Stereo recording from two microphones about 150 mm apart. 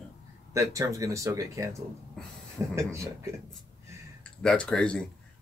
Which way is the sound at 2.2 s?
5° left (ahead or behind).